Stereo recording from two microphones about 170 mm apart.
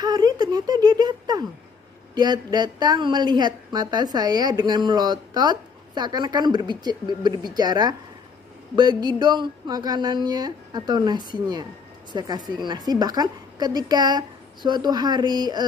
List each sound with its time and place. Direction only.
0.0 s a woman's voice: 25° right (ahead or behind)